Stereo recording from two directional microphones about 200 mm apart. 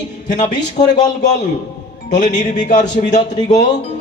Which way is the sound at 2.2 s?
40° left (ahead or behind).